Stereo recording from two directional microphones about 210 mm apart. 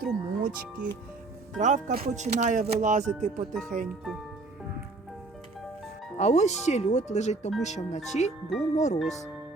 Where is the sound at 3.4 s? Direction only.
Centre (ahead or behind).